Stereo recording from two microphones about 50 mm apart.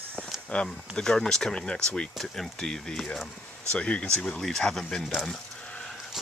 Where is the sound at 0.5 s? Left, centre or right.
Left.